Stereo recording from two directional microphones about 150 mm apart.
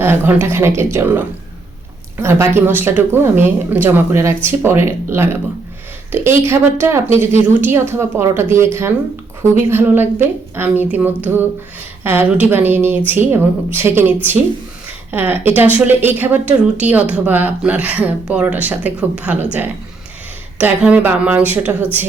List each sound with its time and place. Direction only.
0.0 s a woman's voice: 15° right (ahead or behind)